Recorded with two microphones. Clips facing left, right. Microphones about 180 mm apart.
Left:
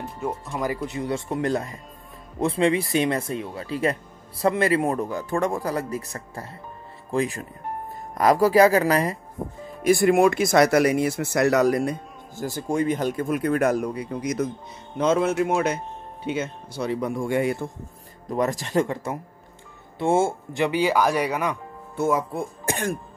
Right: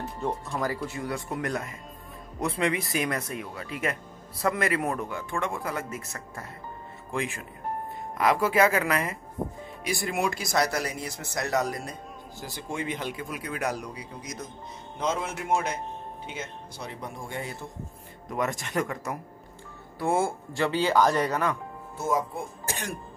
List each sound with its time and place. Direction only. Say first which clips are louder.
0.5 s speech: left 3 dB; 20° left (ahead or behind); by 9.2 s 35° left (ahead or behind)
10.0 s speech: left 10 dB; 55° left (ahead or behind)
10.5 s speech: left 10 dB; 75° left (ahead or behind)
12.4 s speech: left 10 dB; 45° left (ahead or behind)
15.0 s speech: left 10 dB; 70° left (ahead or behind)
18.4 s speech: left 6 dB; 35° left (ahead or behind); by 21.5 s 15° left (ahead or behind)
21.9 s speech: left 5 dB; 70° left (ahead or behind)